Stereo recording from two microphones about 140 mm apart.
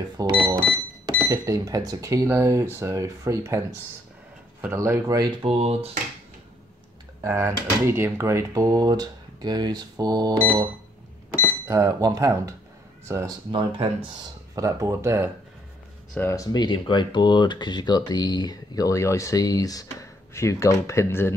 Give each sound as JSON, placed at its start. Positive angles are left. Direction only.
{"t": 0.2, "sound": "speech", "side_deg": -30}
{"t": 5.4, "sound": "speech", "side_deg": -45}
{"t": 7.2, "sound": "speech", "side_deg": -20}
{"t": 11.6, "sound": "speech", "side_deg": -25}
{"t": 13.5, "sound": "speech", "side_deg": -40}
{"t": 14.5, "sound": "speech", "side_deg": -20}
{"t": 16.2, "sound": "speech", "side_deg": 20}